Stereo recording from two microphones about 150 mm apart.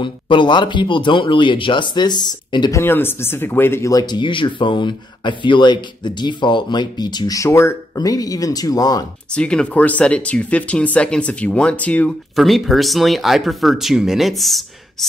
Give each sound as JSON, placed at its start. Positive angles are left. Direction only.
{"t": 0.0, "sound": "speech", "side_deg": 35}
{"t": 2.8, "sound": "speech", "side_deg": 15}
{"t": 9.3, "sound": "speech", "side_deg": 5}
{"t": 12.4, "sound": "speech", "side_deg": 0}